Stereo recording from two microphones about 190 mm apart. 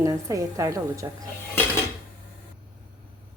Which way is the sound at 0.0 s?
15° right (ahead or behind).